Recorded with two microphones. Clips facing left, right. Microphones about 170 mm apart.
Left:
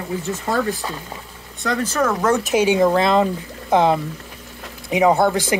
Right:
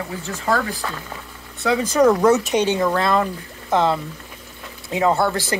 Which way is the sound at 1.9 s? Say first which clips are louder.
Right 5 dB; 10° right (ahead or behind).